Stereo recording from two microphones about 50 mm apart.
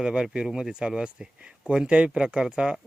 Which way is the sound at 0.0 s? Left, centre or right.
Centre.